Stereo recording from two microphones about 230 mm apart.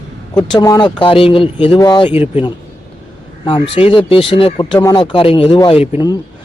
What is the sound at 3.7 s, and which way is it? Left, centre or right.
Speech, left.